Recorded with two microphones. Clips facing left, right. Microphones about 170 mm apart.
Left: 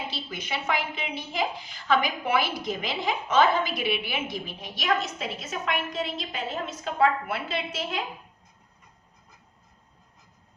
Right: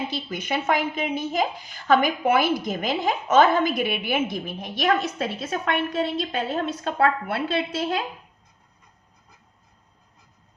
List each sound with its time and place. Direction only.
0.1 s a woman's voice: 50° right (ahead or behind); by 7.4 s 65° right (ahead or behind)